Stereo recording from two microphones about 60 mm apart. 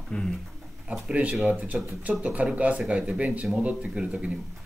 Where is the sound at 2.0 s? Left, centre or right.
Right.